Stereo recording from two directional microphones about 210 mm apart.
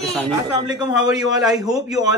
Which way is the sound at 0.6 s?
20° right (ahead or behind).